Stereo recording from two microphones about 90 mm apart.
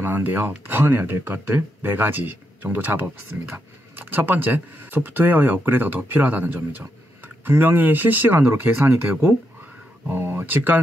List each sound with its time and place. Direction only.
0.0 s speech: 20° right (ahead or behind)
10.1 s speech: 20° right (ahead or behind)